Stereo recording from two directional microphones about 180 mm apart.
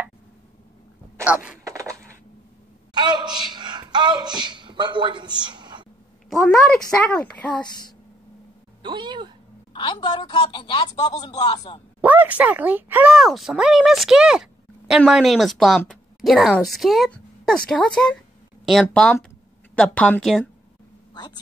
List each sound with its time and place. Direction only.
1.1 s a sound: 5° right (ahead or behind)
1.6 s a sound: 15° right (ahead or behind)
6.3 s a woman's voice: 5° left (ahead or behind)
8.8 s speech: 25° right (ahead or behind)
9.8 s speech: 25° left (ahead or behind)
12.0 s a woman's voice: 10° right (ahead or behind)